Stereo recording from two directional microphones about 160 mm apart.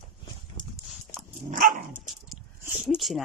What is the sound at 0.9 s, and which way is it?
Dog, centre (ahead or behind).